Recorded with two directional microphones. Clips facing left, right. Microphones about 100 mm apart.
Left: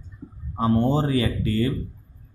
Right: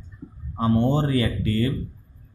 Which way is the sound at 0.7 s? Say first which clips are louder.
Even; 40° left (ahead or behind).